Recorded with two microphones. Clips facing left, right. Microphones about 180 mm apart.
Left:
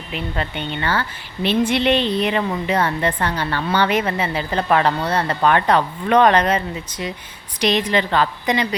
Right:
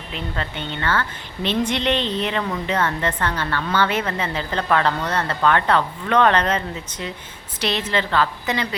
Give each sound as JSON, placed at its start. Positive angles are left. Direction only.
{"t": 0.1, "sound": "a woman's voice", "side_deg": 15}